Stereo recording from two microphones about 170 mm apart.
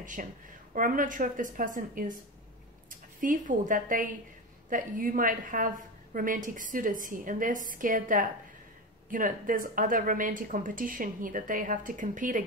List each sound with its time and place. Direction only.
0.0 s a woman's voice: 50° right (ahead or behind)